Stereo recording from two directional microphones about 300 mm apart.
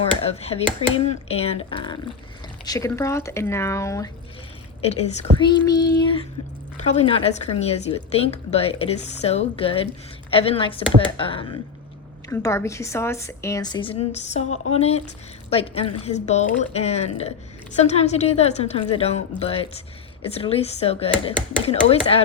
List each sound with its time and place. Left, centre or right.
0.3 s a woman's voice: centre